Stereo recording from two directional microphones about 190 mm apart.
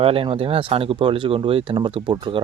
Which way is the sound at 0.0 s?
30° right (ahead or behind).